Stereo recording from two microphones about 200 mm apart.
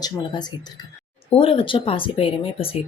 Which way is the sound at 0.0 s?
20° left (ahead or behind).